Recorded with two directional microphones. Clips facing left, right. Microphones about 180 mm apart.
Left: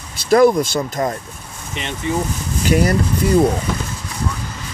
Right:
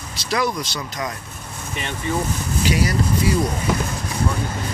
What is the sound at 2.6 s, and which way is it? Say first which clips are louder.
Speech: left 5 dB; 50° left (ahead or behind).